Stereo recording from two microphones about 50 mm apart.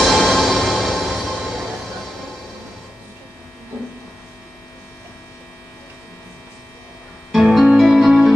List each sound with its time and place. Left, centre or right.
0.0 s music: centre
1.3 s music: centre
7.3 s music: centre